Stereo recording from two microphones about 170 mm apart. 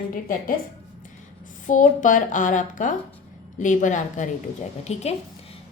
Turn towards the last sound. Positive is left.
turn(degrees=40)  # may be behind; listen again after turning